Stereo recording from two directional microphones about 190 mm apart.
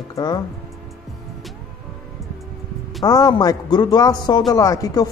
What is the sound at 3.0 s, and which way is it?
A man's voice, 20° left (ahead or behind).